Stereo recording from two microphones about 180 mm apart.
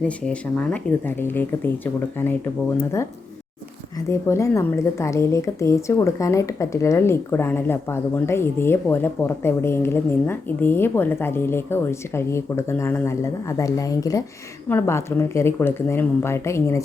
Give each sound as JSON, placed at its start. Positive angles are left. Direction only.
{"t": 0.3, "sound": "a woman's voice", "side_deg": 5}
{"t": 4.1, "sound": "a woman's voice", "side_deg": 15}